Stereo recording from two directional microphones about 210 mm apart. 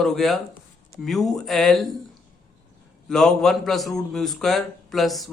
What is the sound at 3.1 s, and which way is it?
A man's voice, centre (ahead or behind).